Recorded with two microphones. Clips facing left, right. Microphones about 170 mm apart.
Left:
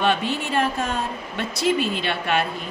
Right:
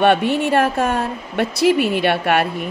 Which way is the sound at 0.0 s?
65° right (ahead or behind).